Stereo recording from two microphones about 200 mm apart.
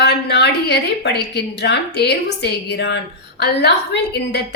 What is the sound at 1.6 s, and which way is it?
A woman's voice, 55° left (ahead or behind).